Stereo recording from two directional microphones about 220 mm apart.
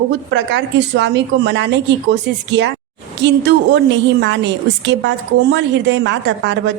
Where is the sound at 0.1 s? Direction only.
50° right (ahead or behind).